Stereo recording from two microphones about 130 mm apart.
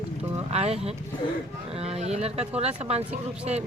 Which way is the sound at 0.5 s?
50° right (ahead or behind).